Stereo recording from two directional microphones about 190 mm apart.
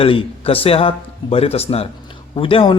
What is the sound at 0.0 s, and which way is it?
A man's voice, 30° left (ahead or behind).